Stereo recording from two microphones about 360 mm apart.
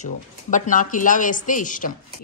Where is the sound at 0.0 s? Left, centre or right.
Left.